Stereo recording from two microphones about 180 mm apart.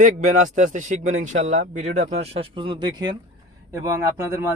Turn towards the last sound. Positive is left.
turn(degrees=-15)  # may be behind; listen again after turning